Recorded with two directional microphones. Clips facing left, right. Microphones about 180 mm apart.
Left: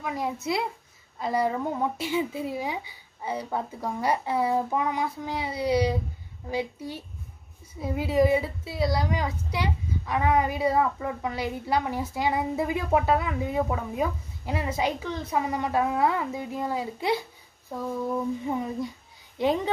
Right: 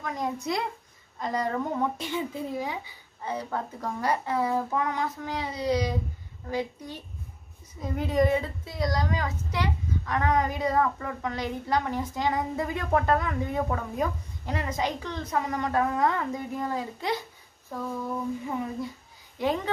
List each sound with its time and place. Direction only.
0.0 s a woman's voice: 5° left (ahead or behind)
19.3 s speech: 15° left (ahead or behind)